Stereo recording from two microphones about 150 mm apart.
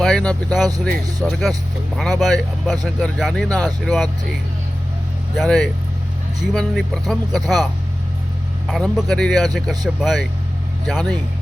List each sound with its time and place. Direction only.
0.0 s speech: 5° left (ahead or behind)
5.4 s speech: centre (ahead or behind)